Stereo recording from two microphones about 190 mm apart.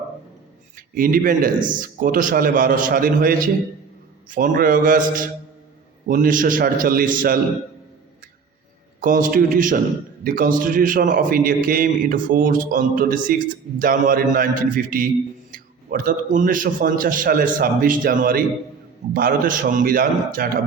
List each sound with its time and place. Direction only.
0.8 s a man's voice: 45° right (ahead or behind)
9.0 s a man's voice: 45° right (ahead or behind)